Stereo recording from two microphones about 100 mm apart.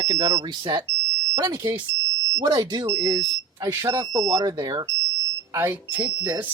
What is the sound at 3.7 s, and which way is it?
Speech, 30° right (ahead or behind).